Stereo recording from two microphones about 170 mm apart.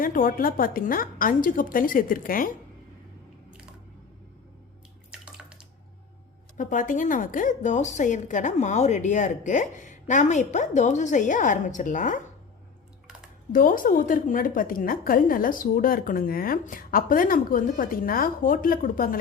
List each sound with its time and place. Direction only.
0.0 s a woman's voice: 55° left (ahead or behind)
5.1 s bathtub: 5° right (ahead or behind)
6.6 s a woman's voice: 50° left (ahead or behind)
13.5 s a woman's voice: 55° left (ahead or behind)